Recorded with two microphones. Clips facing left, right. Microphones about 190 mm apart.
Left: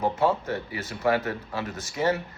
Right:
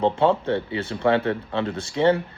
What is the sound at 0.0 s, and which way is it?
Speech, 30° right (ahead or behind).